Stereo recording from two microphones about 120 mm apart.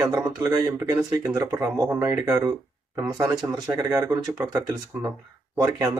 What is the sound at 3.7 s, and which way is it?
Speech, 30° right (ahead or behind).